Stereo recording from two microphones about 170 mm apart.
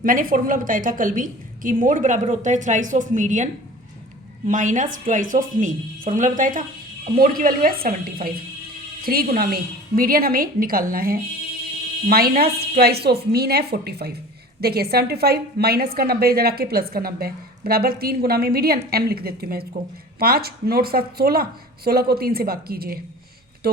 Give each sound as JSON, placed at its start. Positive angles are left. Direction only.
{"t": 0.0, "sound": "a woman's voice", "side_deg": -55}